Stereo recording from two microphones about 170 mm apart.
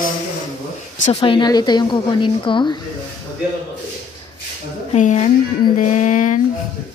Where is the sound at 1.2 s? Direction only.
25° left (ahead or behind).